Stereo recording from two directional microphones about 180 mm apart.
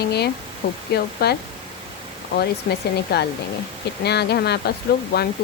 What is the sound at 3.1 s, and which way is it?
Speech, 65° left (ahead or behind).